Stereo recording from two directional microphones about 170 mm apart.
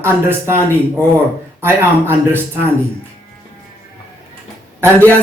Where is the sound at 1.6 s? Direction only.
15° right (ahead or behind).